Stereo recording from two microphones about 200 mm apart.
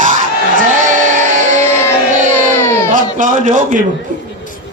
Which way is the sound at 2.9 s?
40° right (ahead or behind).